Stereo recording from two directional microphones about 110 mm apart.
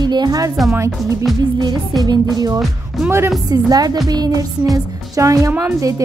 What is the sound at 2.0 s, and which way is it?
Speech, 35° right (ahead or behind).